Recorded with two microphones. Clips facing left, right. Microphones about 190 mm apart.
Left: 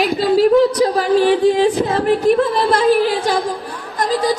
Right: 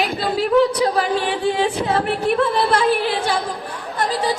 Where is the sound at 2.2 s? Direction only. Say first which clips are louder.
Left 4 dB; 40° left (ahead or behind).